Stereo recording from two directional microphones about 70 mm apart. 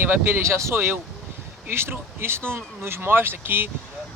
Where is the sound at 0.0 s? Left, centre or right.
Right.